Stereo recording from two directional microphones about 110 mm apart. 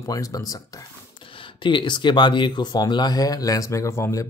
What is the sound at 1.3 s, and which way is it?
Speech, 50° left (ahead or behind).